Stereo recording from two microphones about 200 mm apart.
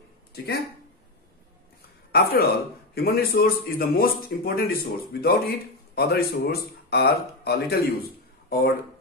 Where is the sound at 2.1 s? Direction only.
50° left (ahead or behind).